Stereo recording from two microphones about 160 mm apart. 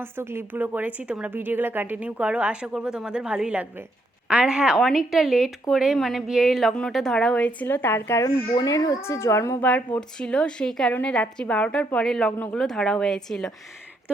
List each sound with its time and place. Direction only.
0.0 s a woman's voice: 15° right (ahead or behind); by 13.5 s 5° left (ahead or behind)